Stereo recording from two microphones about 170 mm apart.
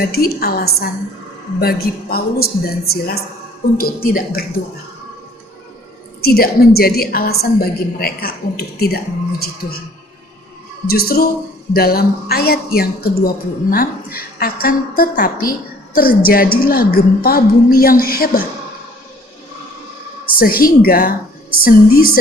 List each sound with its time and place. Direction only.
0.0 s speech: 65° left (ahead or behind)
6.2 s speech: 65° left (ahead or behind)
10.8 s speech: 65° left (ahead or behind)
20.2 s speech: 55° left (ahead or behind)